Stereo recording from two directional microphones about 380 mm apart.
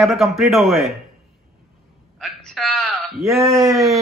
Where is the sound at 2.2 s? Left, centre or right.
Centre.